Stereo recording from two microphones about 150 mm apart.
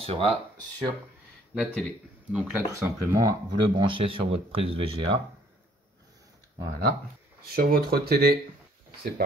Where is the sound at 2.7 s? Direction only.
20° right (ahead or behind).